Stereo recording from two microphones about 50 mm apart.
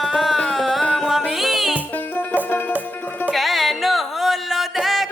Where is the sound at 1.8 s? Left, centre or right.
Left.